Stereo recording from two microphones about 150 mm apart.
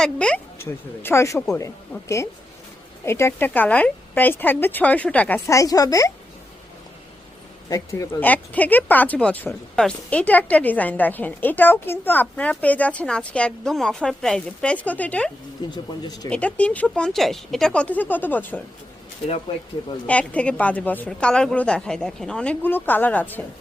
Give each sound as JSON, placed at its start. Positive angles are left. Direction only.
{"t": 0.0, "sound": "speech", "side_deg": 5}
{"t": 0.6, "sound": "speech", "side_deg": 15}
{"t": 5.5, "sound": "speech", "side_deg": 20}
{"t": 7.7, "sound": "speech", "side_deg": 20}
{"t": 15.7, "sound": "speech", "side_deg": 30}
{"t": 16.3, "sound": "speech", "side_deg": 10}
{"t": 20.1, "sound": "speech", "side_deg": 10}